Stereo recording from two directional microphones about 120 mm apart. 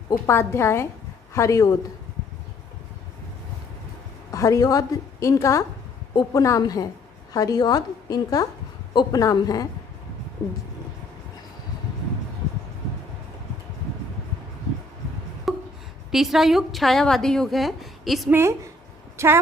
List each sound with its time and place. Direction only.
0.3 s a woman's voice: 20° left (ahead or behind)
4.3 s a woman's voice: 25° left (ahead or behind)
15.5 s a sound: centre (ahead or behind)
16.1 s a woman's voice: 5° right (ahead or behind)
18.3 s a woman's voice: 20° right (ahead or behind)